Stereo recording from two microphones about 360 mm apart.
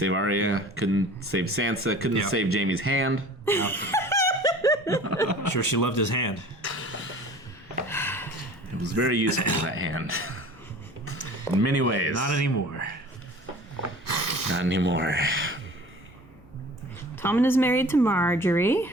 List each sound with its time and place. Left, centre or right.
0.0 s speech: right
3.4 s speech: centre
3.8 s a sound: centre
5.5 s speech: left
6.6 s cough: right
7.9 s a sound: centre
8.8 s speech: right
9.2 s a man's voice: left
9.6 s speech: right
11.6 s speech: right
12.3 s a man's voice: left
14.1 s a sound: left
14.5 s speech: right
17.2 s speech: centre